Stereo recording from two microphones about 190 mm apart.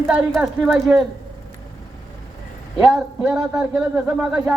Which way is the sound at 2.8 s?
Centre (ahead or behind).